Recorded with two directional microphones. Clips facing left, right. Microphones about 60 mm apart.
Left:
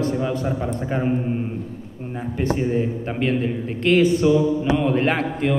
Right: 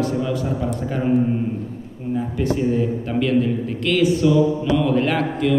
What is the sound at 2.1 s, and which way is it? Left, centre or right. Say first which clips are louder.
A man's voice: right 1 dB; left.